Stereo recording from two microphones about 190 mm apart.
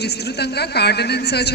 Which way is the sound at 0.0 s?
60° left (ahead or behind).